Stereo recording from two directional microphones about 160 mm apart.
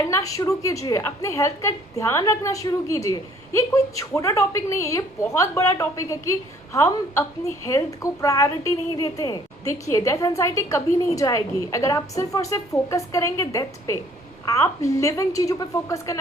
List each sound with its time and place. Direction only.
0.0 s a woman's voice: 20° left (ahead or behind)